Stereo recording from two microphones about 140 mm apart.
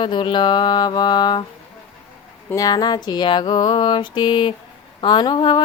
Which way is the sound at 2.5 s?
30° left (ahead or behind).